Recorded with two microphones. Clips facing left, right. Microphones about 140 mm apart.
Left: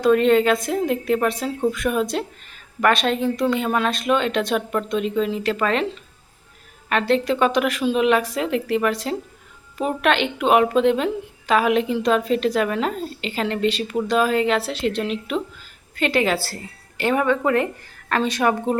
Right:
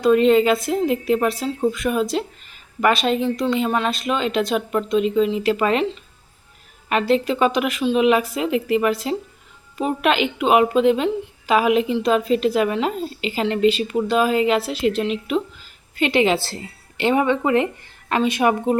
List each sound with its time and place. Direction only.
0.0 s a woman's voice: centre (ahead or behind)
6.8 s a woman's voice: 5° right (ahead or behind)
17.0 s a woman's voice: 20° right (ahead or behind)